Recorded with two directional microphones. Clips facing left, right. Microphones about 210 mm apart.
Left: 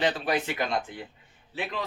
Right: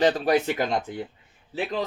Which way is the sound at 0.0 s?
40° right (ahead or behind).